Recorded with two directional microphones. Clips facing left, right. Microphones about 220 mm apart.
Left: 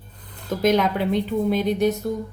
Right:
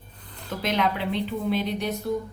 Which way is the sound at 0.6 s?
45° left (ahead or behind).